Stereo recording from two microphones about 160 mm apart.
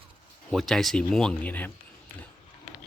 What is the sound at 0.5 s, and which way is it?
Speech, centre (ahead or behind).